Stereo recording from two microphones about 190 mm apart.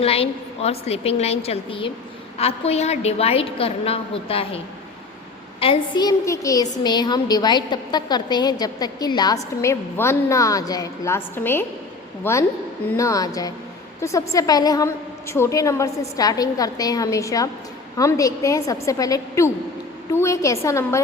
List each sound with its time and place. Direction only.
0.0 s a woman's voice: 30° left (ahead or behind); by 21.0 s 15° left (ahead or behind)